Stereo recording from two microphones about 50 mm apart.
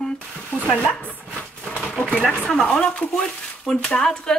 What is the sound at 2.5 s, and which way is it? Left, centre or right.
Speech, left.